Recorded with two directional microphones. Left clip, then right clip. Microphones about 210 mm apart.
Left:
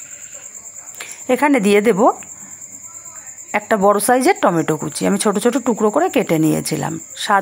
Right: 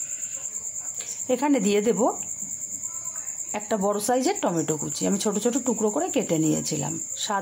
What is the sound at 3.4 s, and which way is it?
Speech, 20° left (ahead or behind).